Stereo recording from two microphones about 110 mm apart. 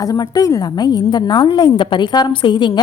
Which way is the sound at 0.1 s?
35° left (ahead or behind).